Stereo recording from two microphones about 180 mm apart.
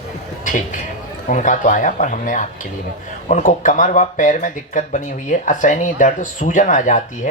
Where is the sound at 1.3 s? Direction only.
45° left (ahead or behind).